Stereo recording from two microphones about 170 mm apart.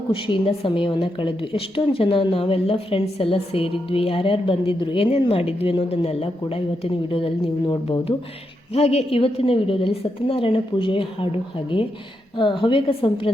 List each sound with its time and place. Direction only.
0.1 s a woman's voice: 30° left (ahead or behind)
8.7 s a woman's voice: 35° left (ahead or behind)